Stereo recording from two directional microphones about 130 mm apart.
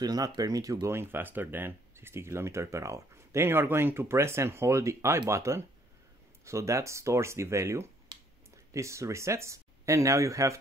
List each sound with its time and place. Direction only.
0.0 s speech: 30° right (ahead or behind)